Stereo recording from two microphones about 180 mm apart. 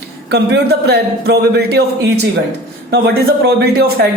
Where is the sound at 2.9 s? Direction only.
65° right (ahead or behind).